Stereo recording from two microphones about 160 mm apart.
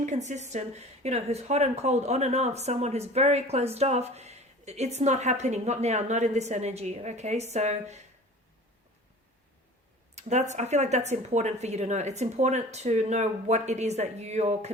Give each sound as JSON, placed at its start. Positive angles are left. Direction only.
{"t": 0.0, "sound": "speech", "side_deg": -45}
{"t": 10.2, "sound": "speech", "side_deg": -45}